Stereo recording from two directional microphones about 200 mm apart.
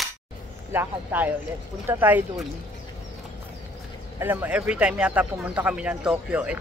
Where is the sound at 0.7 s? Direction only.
10° right (ahead or behind).